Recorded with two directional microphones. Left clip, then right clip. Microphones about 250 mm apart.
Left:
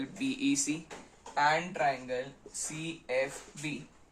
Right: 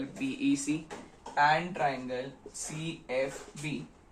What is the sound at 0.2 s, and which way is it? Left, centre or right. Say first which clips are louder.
Speech: right 1 dB; left.